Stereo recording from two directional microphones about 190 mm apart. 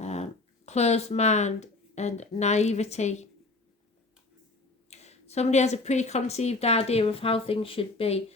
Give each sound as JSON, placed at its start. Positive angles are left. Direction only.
{"t": 0.0, "sound": "speech", "side_deg": 35}
{"t": 4.9, "sound": "a woman's voice", "side_deg": 35}